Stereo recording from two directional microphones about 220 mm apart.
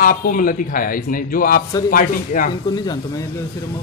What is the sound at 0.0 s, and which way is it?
A man's voice, 40° left (ahead or behind).